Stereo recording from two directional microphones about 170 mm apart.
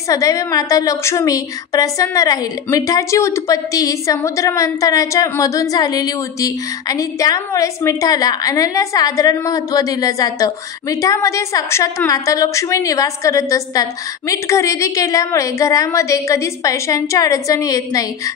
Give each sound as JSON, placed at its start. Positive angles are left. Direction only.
{"t": 0.1, "sound": "a woman's voice", "side_deg": 20}